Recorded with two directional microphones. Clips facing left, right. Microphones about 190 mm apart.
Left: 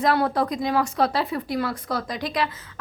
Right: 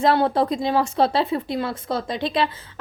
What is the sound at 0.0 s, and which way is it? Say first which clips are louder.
Speech: right 3 dB; 25° right (ahead or behind).